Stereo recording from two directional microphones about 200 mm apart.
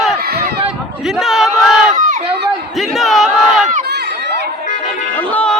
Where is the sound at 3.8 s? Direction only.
55° right (ahead or behind).